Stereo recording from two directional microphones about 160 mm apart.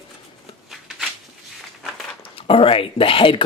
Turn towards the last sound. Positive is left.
turn(degrees=35)  # may be behind; listen again after turning